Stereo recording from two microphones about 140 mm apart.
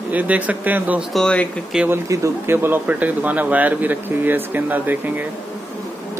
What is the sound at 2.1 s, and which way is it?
Speech, 20° right (ahead or behind).